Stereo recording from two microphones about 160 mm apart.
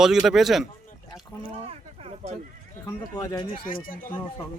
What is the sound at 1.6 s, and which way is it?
Speech, 40° right (ahead or behind).